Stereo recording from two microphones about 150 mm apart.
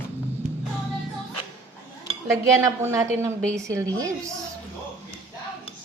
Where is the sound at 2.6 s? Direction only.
20° right (ahead or behind).